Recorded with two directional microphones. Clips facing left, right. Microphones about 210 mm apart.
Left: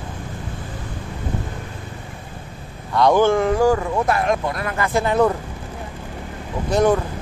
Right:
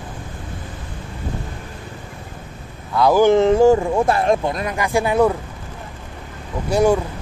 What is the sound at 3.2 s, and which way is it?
Speech, 25° right (ahead or behind).